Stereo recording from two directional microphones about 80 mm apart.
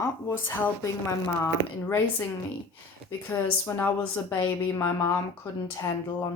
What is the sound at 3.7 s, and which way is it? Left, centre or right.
A woman's voice, left.